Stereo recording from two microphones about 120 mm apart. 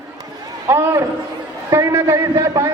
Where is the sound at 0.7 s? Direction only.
20° right (ahead or behind).